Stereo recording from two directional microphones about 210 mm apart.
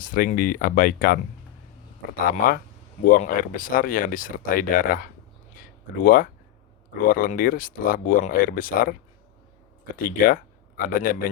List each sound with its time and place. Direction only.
0.0 s speech: 40° left (ahead or behind)
2.3 s speech: 45° left (ahead or behind)
5.5 s a sound: 40° left (ahead or behind)
7.1 s speech: 45° left (ahead or behind)